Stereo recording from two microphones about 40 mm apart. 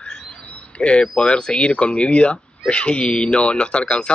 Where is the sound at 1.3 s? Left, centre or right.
Left.